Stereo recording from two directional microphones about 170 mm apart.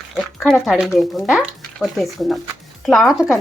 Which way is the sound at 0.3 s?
Centre (ahead or behind).